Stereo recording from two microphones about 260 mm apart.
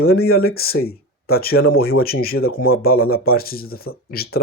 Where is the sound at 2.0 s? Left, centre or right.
Left.